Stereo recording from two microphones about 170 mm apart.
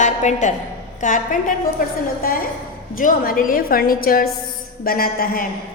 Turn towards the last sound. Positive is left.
turn(degrees=55)  # may be behind; listen again after turning